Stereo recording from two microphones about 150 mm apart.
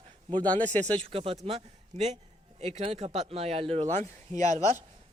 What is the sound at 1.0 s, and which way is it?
A man's voice, 40° right (ahead or behind).